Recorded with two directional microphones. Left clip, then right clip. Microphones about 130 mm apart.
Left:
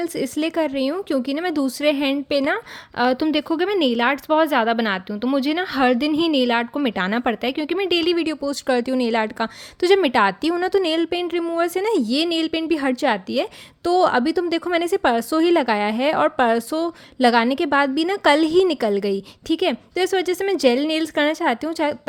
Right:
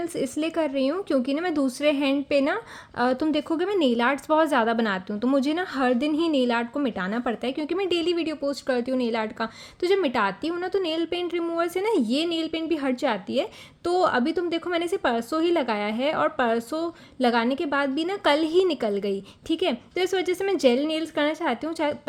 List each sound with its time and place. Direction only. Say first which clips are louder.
0.0 s speech: left 4 dB; 25° left (ahead or behind)